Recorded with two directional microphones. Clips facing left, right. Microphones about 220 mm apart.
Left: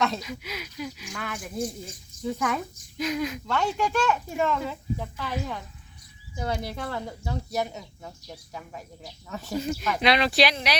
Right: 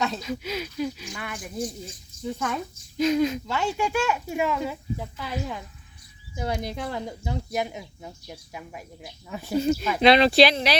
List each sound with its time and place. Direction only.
0.2 s speech: 25° right (ahead or behind)
1.1 s a child's voice: centre (ahead or behind)
3.0 s speech: 25° right (ahead or behind)
3.4 s speech: 5° right (ahead or behind)
9.6 s speech: 30° right (ahead or behind)